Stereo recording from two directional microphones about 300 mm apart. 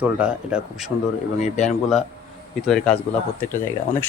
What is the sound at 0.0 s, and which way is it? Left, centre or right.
Speech, centre.